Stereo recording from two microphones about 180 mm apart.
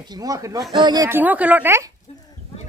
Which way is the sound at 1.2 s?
10° right (ahead or behind).